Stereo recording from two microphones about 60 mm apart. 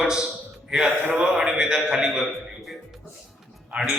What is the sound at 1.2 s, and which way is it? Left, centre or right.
A man's voice, centre.